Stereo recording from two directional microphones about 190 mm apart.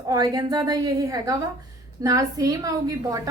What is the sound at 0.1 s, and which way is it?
A woman's voice, 20° right (ahead or behind).